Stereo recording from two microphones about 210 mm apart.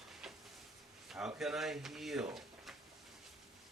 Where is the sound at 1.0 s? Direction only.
5° right (ahead or behind).